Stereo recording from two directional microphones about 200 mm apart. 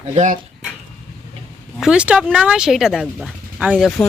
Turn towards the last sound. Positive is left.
turn(degrees=-5)  # may be behind; listen again after turning